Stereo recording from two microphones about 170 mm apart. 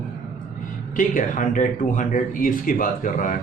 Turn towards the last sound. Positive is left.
turn(degrees=50)  # may be behind; listen again after turning